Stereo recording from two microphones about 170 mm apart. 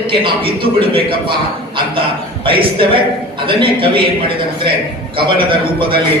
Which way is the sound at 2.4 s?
30° right (ahead or behind).